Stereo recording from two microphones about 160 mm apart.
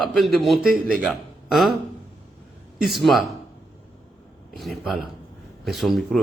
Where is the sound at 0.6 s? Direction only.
65° right (ahead or behind).